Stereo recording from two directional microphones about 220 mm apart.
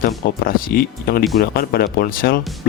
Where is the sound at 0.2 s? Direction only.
40° left (ahead or behind).